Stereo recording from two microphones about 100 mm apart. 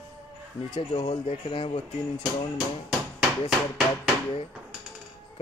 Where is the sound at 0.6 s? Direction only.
75° left (ahead or behind).